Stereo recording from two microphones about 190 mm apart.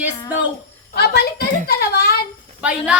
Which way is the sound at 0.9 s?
55° left (ahead or behind).